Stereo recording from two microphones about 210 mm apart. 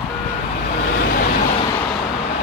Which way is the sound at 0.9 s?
45° left (ahead or behind).